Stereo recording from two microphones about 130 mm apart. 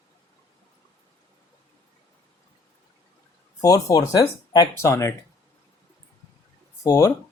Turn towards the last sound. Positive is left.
turn(degrees=25)  # may be behind; listen again after turning